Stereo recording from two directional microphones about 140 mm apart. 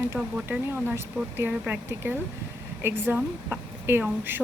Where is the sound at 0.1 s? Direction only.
15° right (ahead or behind).